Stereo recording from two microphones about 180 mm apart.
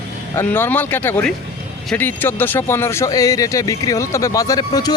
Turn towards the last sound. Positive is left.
turn(degrees=20)  # may be behind; listen again after turning